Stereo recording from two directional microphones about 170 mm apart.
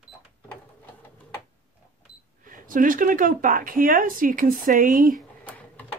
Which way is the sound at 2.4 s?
55° right (ahead or behind).